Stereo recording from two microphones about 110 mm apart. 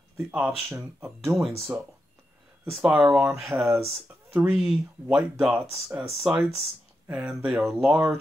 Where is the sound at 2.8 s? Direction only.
10° right (ahead or behind).